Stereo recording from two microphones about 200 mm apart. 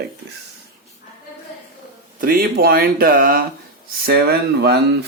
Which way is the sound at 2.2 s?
45° right (ahead or behind).